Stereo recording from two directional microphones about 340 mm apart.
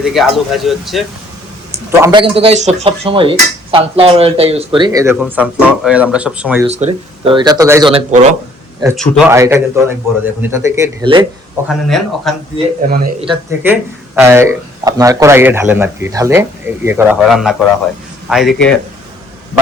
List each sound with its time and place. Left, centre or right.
0.0 s speech: centre
2.0 s speech: centre
6.7 s speech: centre
8.8 s speech: centre
11.7 s speech: centre
12.5 s a man's voice: right
13.2 s speech: centre